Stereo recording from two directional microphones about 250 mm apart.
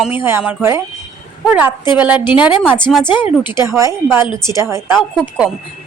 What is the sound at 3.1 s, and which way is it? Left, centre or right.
Speech, centre.